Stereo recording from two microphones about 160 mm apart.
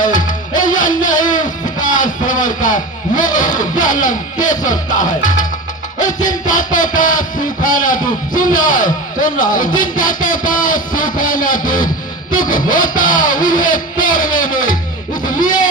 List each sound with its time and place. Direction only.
0.0 s music: 55° left (ahead or behind)
12.3 s a sound: 55° left (ahead or behind)
15.2 s music: 55° left (ahead or behind)